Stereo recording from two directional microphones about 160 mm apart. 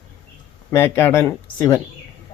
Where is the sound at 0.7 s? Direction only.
15° left (ahead or behind).